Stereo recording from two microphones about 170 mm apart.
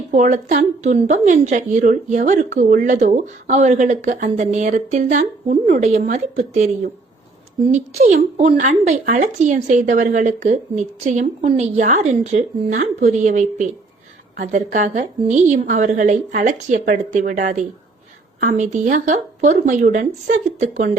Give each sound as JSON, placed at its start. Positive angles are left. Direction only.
{"t": 0.1, "sound": "a woman's voice", "side_deg": -50}